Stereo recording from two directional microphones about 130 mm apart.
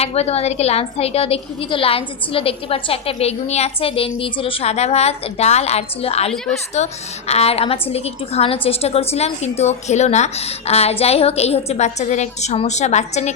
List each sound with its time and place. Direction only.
0.0 s a woman's voice: 50° left (ahead or behind)